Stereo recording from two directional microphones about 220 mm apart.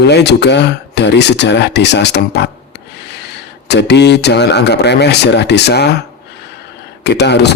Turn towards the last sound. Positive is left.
turn(degrees=50)  # may be behind; listen again after turning